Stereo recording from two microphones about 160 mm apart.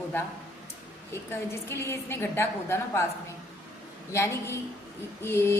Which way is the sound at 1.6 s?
15° left (ahead or behind).